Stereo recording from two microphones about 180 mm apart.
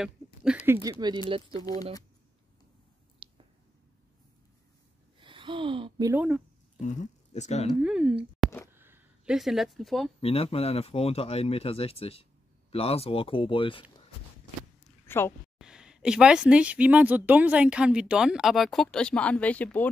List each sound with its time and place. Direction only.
0.0 s a sound: 5° right (ahead or behind)
0.9 s speech: 20° right (ahead or behind)
3.2 s a sound: 30° right (ahead or behind)
5.2 s speech: 25° right (ahead or behind)
6.1 s speech: 5° right (ahead or behind)
6.8 s speech: 40° left (ahead or behind)
7.8 s speech: 5° right (ahead or behind)
8.7 s a sound: 10° right (ahead or behind)
10.2 s speech: 30° left (ahead or behind)
15.0 s a woman's voice: 15° left (ahead or behind)
15.6 s speech: 5° right (ahead or behind)